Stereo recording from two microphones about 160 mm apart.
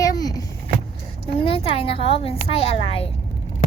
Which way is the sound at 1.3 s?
35° left (ahead or behind).